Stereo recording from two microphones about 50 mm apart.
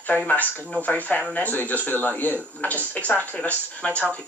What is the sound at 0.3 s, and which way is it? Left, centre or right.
A man's voice, left.